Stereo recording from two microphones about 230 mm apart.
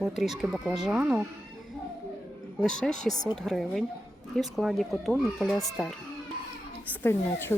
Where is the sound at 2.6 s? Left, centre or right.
Centre.